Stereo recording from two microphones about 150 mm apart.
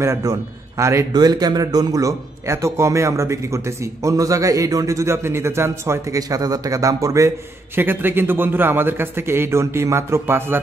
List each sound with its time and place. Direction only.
0.0 s a man's voice: 20° right (ahead or behind)